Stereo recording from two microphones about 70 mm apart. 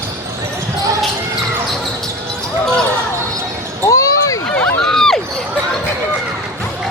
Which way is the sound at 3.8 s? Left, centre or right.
Left.